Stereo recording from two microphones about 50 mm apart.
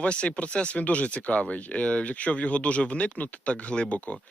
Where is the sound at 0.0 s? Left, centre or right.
Left.